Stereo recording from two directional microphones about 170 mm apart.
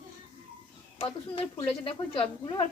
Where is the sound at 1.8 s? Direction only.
30° left (ahead or behind).